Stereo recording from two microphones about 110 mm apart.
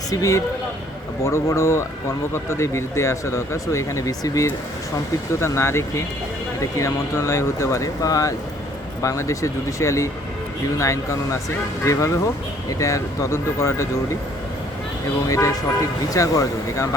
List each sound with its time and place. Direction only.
0.1 s speech: 30° left (ahead or behind)
15.3 s speech: 30° left (ahead or behind)